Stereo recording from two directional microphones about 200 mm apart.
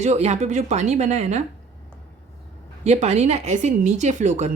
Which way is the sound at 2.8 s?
35° right (ahead or behind).